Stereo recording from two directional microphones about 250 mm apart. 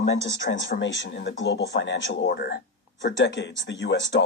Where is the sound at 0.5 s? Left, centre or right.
Left.